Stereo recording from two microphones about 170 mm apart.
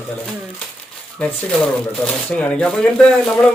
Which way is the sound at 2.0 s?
5° left (ahead or behind).